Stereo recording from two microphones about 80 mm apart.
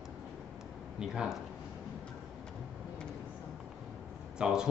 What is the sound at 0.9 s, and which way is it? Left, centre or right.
Speech, centre.